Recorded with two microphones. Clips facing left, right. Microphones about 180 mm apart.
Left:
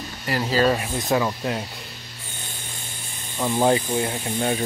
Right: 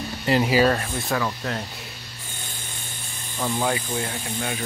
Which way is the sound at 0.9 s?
20° left (ahead or behind).